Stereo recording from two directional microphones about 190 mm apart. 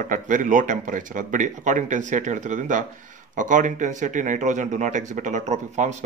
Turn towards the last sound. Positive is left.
turn(degrees=-40)  # may be behind; listen again after turning